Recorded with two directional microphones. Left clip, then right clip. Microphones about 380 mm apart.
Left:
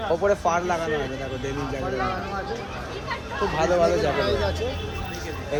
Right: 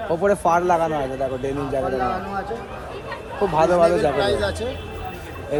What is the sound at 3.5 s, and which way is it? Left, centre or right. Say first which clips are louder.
Speech: right 5 dB; centre.